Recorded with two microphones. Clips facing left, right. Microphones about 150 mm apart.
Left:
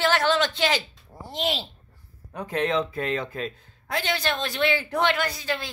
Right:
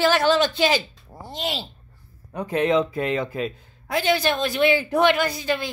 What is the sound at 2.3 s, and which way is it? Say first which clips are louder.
Speech: right 5 dB; 5° right (ahead or behind).